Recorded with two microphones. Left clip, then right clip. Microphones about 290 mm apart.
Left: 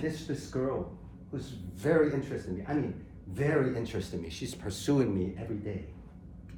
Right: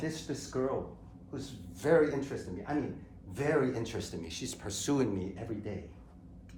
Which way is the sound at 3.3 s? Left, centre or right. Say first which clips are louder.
Left 1 dB; centre.